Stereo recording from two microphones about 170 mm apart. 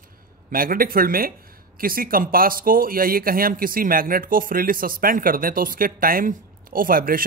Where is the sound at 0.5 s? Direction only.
55° right (ahead or behind).